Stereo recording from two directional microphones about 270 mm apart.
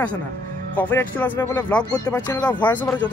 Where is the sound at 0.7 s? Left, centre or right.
Centre.